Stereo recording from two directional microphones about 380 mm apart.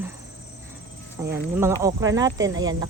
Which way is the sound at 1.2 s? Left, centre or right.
Centre.